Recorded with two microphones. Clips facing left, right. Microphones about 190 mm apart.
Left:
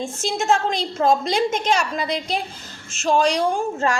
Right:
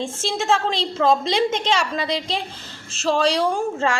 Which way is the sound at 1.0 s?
30° right (ahead or behind).